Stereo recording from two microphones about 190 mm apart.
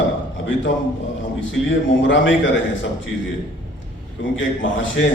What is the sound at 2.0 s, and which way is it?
Speech, 75° left (ahead or behind).